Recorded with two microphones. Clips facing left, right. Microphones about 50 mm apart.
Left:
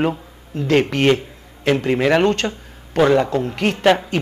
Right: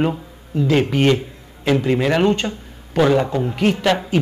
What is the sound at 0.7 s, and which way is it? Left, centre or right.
Speech, left.